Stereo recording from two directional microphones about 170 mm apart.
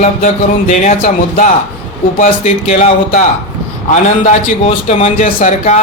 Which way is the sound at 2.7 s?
40° left (ahead or behind).